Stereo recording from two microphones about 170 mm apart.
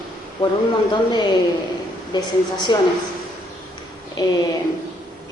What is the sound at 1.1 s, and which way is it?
Speech, 25° left (ahead or behind).